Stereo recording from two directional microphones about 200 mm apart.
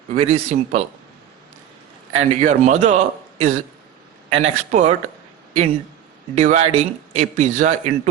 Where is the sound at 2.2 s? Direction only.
35° right (ahead or behind).